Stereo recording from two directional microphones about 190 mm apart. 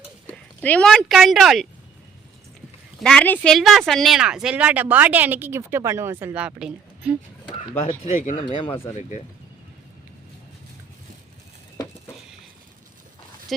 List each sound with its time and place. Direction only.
0.3 s speech: 5° left (ahead or behind)
3.0 s speech: 5° left (ahead or behind)
7.9 s speech: 40° left (ahead or behind)
8.4 s speech: 25° left (ahead or behind)
9.0 s speech: 40° left (ahead or behind)